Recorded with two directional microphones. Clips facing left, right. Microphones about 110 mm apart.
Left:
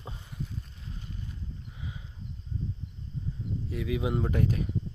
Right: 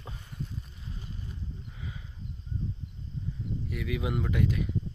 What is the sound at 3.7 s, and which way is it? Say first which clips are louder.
Speech: left 3 dB; 25° left (ahead or behind).